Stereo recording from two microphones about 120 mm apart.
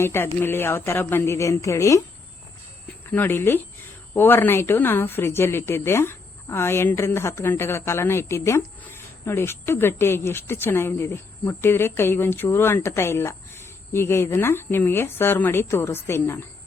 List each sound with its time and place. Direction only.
0.0 s speech: 20° left (ahead or behind)
3.1 s speech: 15° left (ahead or behind)